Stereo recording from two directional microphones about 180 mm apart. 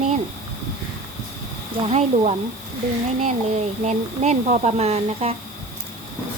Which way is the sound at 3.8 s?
40° right (ahead or behind).